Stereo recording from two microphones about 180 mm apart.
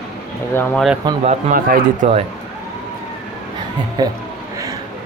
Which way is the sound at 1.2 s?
40° right (ahead or behind).